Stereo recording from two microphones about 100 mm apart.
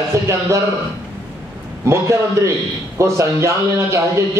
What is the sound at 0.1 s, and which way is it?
Speech, 30° right (ahead or behind).